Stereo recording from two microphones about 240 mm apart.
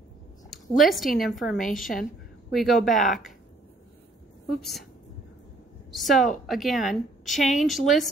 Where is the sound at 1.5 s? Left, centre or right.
Left.